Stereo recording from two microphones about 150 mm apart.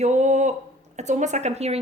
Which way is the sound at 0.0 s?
50° right (ahead or behind).